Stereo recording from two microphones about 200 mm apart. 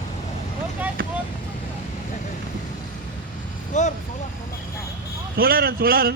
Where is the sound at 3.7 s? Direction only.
35° left (ahead or behind).